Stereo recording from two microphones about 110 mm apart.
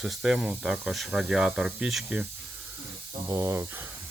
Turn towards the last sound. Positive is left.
turn(degrees=-25)  # may be behind; listen again after turning